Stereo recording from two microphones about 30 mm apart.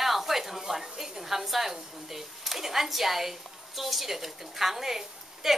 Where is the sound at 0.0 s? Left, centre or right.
Centre.